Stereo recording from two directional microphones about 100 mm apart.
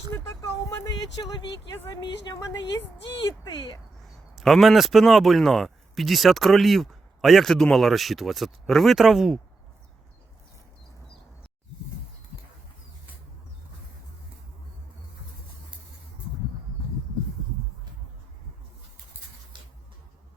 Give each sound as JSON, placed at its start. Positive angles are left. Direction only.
{"t": 0.9, "sound": "a woman's voice", "side_deg": 40}
{"t": 1.7, "sound": "a woman's voice", "side_deg": 25}
{"t": 2.0, "sound": "a woman's voice", "side_deg": 45}
{"t": 4.0, "sound": "speech", "side_deg": 0}